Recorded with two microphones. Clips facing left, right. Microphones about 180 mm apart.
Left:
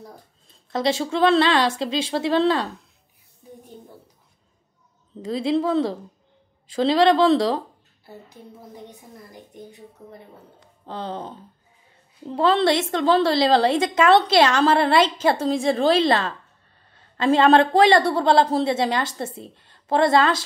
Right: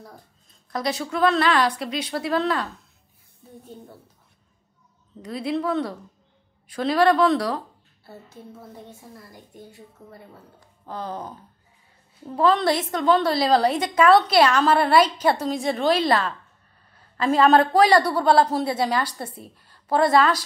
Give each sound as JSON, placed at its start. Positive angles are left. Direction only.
{"t": 0.5, "sound": "a woman's voice", "side_deg": 25}
{"t": 5.2, "sound": "a woman's voice", "side_deg": 25}
{"t": 8.3, "sound": "a woman's voice", "side_deg": 15}